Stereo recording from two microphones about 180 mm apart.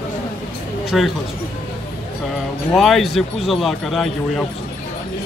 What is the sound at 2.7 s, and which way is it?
Speech, centre (ahead or behind).